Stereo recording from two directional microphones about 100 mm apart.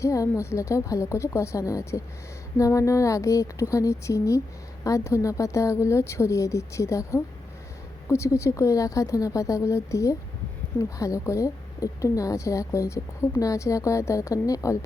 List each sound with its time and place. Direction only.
0.0 s a woman's voice: 30° left (ahead or behind)
8.0 s a woman's voice: 30° left (ahead or behind)